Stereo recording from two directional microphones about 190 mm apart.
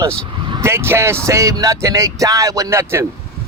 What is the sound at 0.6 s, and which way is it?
Speech, 15° right (ahead or behind).